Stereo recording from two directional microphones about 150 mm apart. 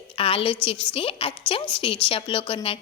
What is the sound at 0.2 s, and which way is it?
Speech, 40° left (ahead or behind).